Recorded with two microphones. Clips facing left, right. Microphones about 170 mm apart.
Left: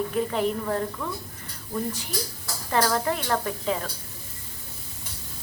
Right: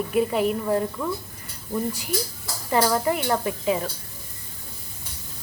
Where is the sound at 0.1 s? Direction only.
10° right (ahead or behind).